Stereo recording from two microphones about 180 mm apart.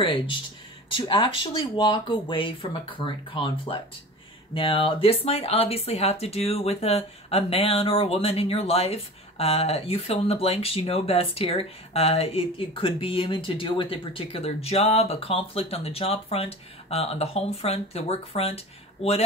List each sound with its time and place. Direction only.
0.0 s speech: 30° left (ahead or behind)